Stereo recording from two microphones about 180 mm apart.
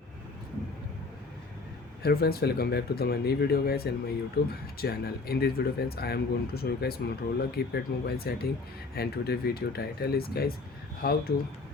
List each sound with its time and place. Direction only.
2.0 s speech: 60° left (ahead or behind)